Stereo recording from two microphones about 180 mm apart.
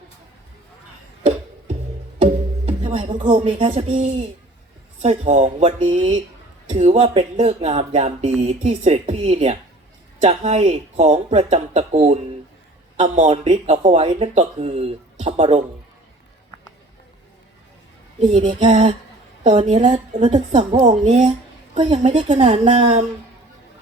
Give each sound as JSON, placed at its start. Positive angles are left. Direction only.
{"t": 2.2, "sound": "music", "side_deg": -30}
{"t": 3.3, "sound": "speech", "side_deg": -35}
{"t": 18.2, "sound": "speech", "side_deg": -30}
{"t": 18.7, "sound": "speech", "side_deg": -40}